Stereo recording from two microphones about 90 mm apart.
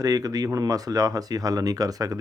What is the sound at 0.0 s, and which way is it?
Speech, 45° right (ahead or behind).